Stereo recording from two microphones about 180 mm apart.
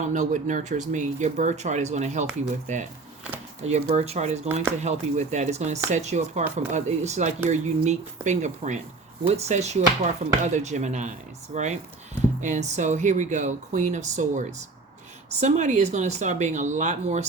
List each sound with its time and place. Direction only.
0.0 s speech: 40° right (ahead or behind)
3.7 s speech: 35° right (ahead or behind)